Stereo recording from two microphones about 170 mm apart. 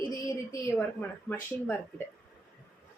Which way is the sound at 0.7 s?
10° left (ahead or behind).